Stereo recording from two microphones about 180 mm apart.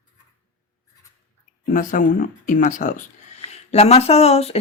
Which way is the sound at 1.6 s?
45° left (ahead or behind).